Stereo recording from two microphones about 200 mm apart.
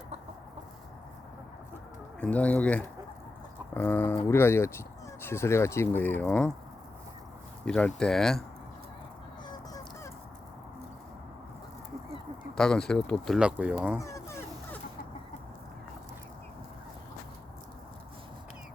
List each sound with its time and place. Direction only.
2.2 s speech: 5° left (ahead or behind)
7.6 s speech: 5° left (ahead or behind)
9.5 s a sound: 20° left (ahead or behind)
12.5 s speech: 5° left (ahead or behind)
14.0 s dog: 15° left (ahead or behind)